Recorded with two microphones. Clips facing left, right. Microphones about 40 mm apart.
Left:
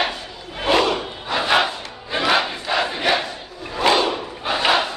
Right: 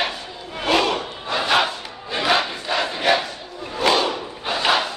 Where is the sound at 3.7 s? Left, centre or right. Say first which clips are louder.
Left 1 dB; centre.